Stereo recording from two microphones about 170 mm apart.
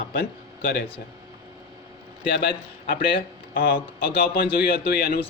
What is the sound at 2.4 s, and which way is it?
A man's voice, 65° left (ahead or behind).